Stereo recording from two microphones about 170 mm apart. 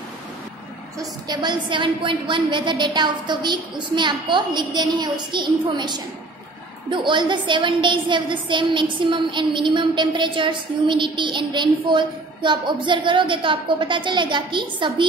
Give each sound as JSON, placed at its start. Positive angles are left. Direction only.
{"t": 0.9, "sound": "a woman's voice", "side_deg": -25}